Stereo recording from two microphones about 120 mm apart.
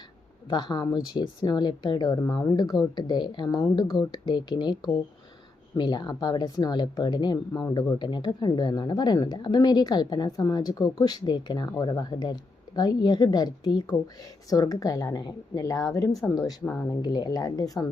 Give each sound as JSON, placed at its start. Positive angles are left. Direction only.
{"t": 0.5, "sound": "speech", "side_deg": 35}